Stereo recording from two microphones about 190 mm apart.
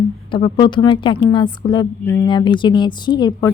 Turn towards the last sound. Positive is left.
turn(degrees=20)  # may be behind; listen again after turning